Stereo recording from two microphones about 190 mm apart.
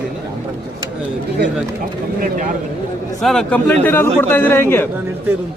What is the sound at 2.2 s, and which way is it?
Speech, 40° right (ahead or behind).